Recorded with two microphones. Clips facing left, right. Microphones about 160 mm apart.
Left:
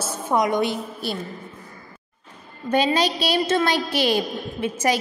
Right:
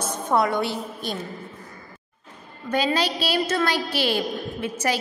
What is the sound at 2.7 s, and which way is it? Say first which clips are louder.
A woman's voice: left 3 dB; 20° left (ahead or behind).